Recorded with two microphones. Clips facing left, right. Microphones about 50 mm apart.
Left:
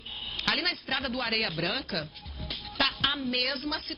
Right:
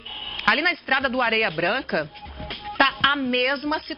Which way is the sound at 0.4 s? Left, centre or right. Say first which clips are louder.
Right 10 dB; right.